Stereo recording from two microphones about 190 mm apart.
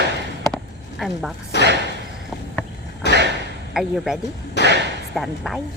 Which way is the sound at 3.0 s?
65° left (ahead or behind).